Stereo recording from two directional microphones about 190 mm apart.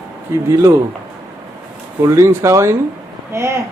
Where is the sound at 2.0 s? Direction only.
15° right (ahead or behind).